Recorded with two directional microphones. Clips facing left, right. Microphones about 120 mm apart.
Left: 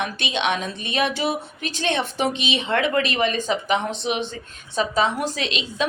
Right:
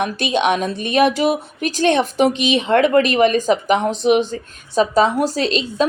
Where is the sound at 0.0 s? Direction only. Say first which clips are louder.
Right 7 dB; 45° right (ahead or behind).